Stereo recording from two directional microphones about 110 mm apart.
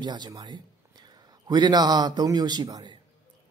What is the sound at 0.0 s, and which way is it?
A man's voice, 40° right (ahead or behind).